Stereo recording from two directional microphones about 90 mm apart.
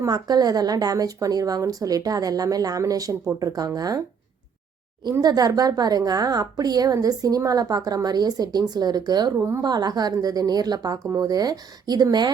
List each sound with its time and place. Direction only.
0.0 s a woman's voice: 50° right (ahead or behind)
5.2 s a woman's voice: 45° right (ahead or behind)
9.4 s speech: 35° right (ahead or behind)
9.6 s a woman's voice: 50° right (ahead or behind)